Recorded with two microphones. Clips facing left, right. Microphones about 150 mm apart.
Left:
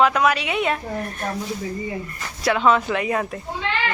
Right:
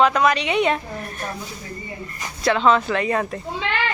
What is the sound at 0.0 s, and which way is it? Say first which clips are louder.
Speech: right 1 dB; 5° left (ahead or behind).